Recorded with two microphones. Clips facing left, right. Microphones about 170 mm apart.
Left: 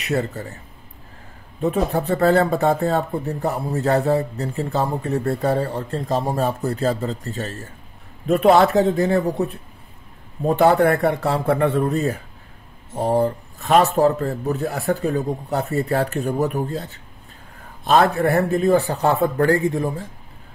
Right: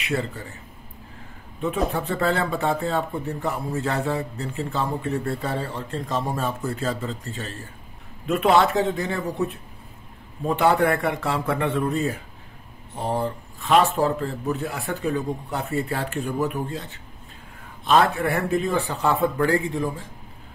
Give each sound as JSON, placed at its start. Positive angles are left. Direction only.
{"t": 0.0, "sound": "speech", "side_deg": 40}
{"t": 1.9, "sound": "speech", "side_deg": 40}